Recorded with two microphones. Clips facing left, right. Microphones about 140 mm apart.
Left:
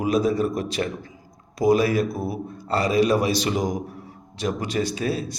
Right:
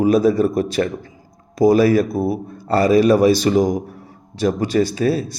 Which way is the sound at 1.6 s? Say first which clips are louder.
Right 6 dB; 40° right (ahead or behind).